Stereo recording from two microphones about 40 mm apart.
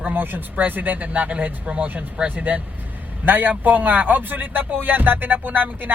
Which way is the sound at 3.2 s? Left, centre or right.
Right.